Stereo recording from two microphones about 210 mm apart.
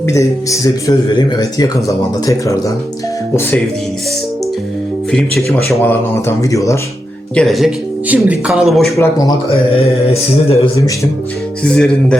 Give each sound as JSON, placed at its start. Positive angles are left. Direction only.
{"t": 0.0, "sound": "a man's voice", "side_deg": 15}
{"t": 5.5, "sound": "a man's voice", "side_deg": 0}
{"t": 7.3, "sound": "speech", "side_deg": 0}
{"t": 9.0, "sound": "a man's voice", "side_deg": 15}
{"t": 9.8, "sound": "mantra", "side_deg": 30}
{"t": 11.7, "sound": "speech", "side_deg": 5}